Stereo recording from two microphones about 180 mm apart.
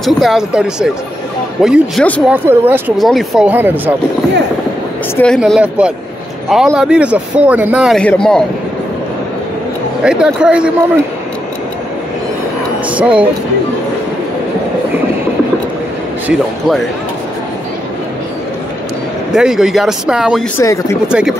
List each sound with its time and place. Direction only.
0.0 s a man's voice: centre (ahead or behind)
3.0 s a man's voice: centre (ahead or behind)
5.1 s a man's voice: 5° left (ahead or behind)
5.4 s a man's voice: 5° right (ahead or behind)
8.0 s a man's voice: 5° left (ahead or behind)
10.0 s a man's voice: 5° right (ahead or behind)
12.9 s speech: 5° right (ahead or behind)
16.3 s a man's voice: centre (ahead or behind)
19.3 s a man's voice: 5° right (ahead or behind)
20.5 s speech: 15° left (ahead or behind)
21.1 s a man's voice: 5° right (ahead or behind)